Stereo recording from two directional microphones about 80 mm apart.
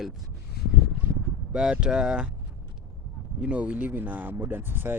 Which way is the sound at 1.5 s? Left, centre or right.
Centre.